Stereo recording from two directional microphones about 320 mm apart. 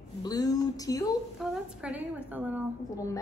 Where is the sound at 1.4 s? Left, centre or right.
Centre.